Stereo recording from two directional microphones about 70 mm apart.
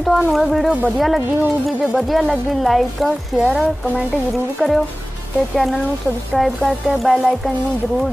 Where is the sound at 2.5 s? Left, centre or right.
Centre.